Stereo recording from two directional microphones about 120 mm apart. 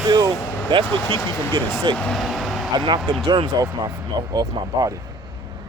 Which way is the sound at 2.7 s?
35° right (ahead or behind).